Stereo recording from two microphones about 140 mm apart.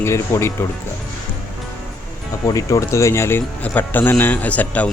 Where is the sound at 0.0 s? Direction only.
20° left (ahead or behind).